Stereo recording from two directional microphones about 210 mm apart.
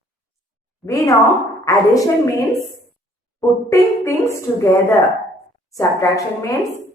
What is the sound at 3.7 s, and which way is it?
Speech, 15° left (ahead or behind).